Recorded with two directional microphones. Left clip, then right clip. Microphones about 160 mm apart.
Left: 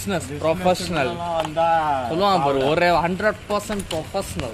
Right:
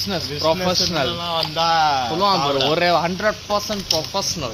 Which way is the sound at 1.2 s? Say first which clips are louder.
Even; 90° right.